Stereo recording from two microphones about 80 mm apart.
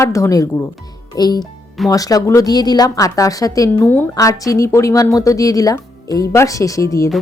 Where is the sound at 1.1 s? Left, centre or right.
Left.